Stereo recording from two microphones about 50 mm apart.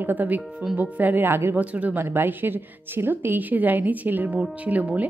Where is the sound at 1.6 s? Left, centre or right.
Right.